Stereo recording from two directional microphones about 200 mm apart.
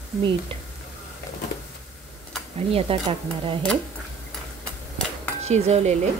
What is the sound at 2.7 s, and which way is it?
Speech, 30° right (ahead or behind).